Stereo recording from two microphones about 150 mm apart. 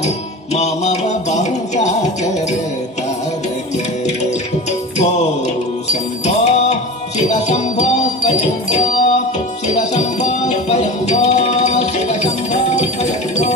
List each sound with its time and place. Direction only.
0.6 s music: 50° left (ahead or behind)
5.9 s music: 50° left (ahead or behind)